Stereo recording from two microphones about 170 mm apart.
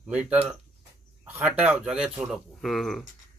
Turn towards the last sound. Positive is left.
turn(degrees=0)  # may be behind; listen again after turning